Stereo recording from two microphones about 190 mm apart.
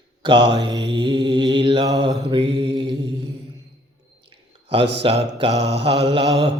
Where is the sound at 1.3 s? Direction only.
25° right (ahead or behind).